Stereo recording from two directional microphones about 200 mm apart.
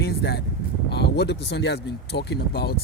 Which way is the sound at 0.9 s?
55° left (ahead or behind).